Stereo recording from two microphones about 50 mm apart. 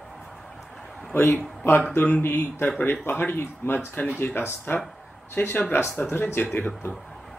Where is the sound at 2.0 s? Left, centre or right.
Left.